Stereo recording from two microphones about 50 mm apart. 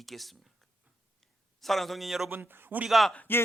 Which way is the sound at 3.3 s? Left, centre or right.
Left.